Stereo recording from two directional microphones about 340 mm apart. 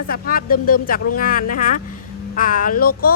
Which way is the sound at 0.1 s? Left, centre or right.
Left.